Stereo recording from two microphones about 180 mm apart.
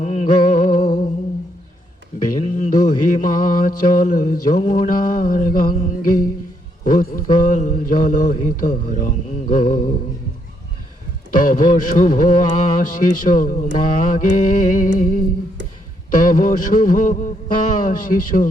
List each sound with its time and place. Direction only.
0.0 s music: 40° left (ahead or behind)
2.4 s mantra: 45° left (ahead or behind)
11.3 s music: 50° left (ahead or behind)
13.0 s a sound: 50° left (ahead or behind)